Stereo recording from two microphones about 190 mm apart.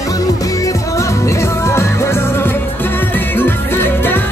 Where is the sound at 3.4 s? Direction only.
10° left (ahead or behind).